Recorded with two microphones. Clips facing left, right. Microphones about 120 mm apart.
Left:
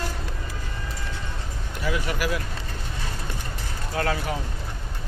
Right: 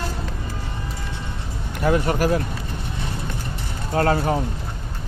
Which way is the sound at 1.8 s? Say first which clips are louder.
Right 8 dB; 45° right (ahead or behind).